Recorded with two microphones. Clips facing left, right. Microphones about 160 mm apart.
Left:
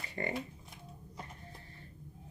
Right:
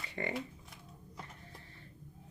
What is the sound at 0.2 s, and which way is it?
Speech, 35° left (ahead or behind).